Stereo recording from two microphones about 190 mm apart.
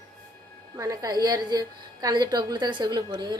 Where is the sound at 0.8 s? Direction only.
20° right (ahead or behind).